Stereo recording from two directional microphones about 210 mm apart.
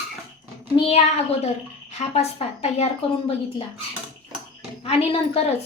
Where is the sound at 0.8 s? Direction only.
30° left (ahead or behind).